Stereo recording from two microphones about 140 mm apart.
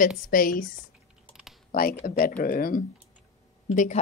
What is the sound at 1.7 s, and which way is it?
Speech, 90° left.